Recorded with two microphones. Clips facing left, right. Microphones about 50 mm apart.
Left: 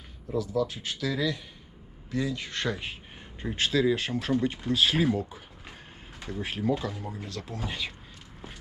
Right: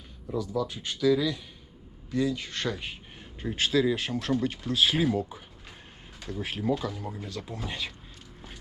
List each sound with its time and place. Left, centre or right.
0.3 s speech: centre
2.1 s speech: centre
4.8 s speech: centre
6.9 s speech: centre
7.3 s speech: centre
7.6 s speech: centre